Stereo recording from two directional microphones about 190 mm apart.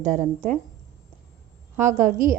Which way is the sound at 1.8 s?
40° right (ahead or behind).